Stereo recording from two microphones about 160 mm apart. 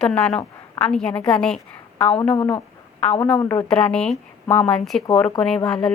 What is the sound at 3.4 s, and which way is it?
Speech, 15° left (ahead or behind).